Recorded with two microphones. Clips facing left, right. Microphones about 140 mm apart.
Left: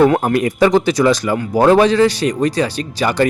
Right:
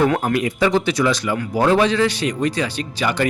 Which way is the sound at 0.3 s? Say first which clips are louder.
Left 5 dB; 45° left (ahead or behind).